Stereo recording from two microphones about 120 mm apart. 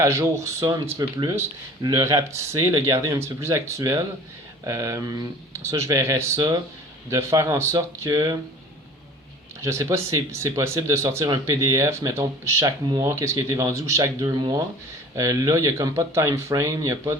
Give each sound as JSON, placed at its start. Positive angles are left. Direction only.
{"t": 0.0, "sound": "speech", "side_deg": -25}
{"t": 9.6, "sound": "speech", "side_deg": -25}